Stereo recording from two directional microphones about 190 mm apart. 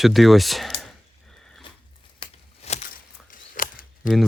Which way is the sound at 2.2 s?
35° left (ahead or behind).